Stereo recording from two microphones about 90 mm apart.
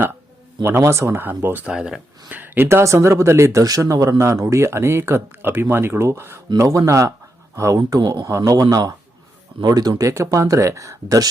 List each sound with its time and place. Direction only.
0.6 s speech: 30° right (ahead or behind)
1.6 s speech: 10° right (ahead or behind)
2.3 s speech: 25° right (ahead or behind); by 10.1 s 45° right (ahead or behind)
10.1 s speech: 35° right (ahead or behind)